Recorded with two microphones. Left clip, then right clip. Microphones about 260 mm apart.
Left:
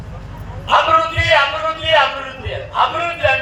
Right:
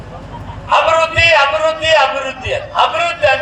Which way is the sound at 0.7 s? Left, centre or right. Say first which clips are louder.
Right 2 dB; right.